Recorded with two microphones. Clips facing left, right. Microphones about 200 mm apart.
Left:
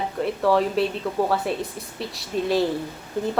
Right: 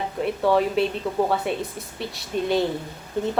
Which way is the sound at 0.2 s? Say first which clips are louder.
Even; centre (ahead or behind).